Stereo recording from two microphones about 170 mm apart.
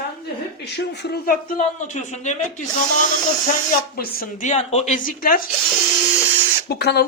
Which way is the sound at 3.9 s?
60° left (ahead or behind).